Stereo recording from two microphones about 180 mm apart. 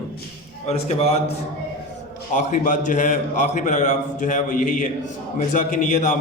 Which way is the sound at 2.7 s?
45° left (ahead or behind).